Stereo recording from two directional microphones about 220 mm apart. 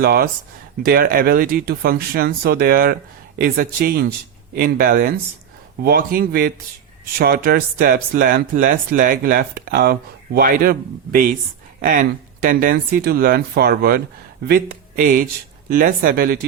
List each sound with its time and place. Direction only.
0.0 s speech: 45° right (ahead or behind)